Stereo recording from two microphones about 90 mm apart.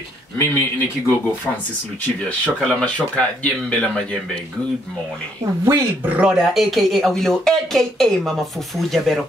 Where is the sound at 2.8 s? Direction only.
10° left (ahead or behind).